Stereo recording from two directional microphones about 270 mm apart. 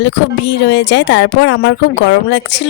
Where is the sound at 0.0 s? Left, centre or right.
Left.